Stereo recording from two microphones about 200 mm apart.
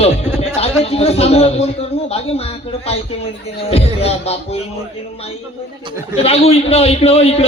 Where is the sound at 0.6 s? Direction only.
30° left (ahead or behind).